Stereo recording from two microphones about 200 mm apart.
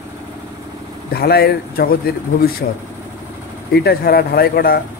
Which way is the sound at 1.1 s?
50° left (ahead or behind).